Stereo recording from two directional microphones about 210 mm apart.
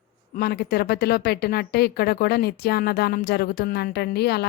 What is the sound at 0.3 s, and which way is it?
Speech, 50° left (ahead or behind).